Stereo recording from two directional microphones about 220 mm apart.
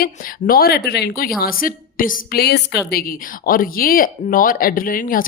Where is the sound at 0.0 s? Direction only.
40° left (ahead or behind).